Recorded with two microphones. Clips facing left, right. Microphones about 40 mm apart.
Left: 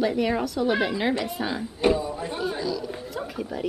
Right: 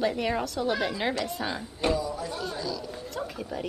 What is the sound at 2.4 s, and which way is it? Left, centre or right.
Speech, centre.